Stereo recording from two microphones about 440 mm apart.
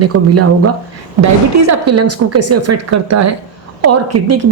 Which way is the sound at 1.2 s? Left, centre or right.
Right.